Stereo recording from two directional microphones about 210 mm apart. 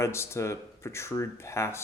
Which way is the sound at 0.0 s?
10° left (ahead or behind).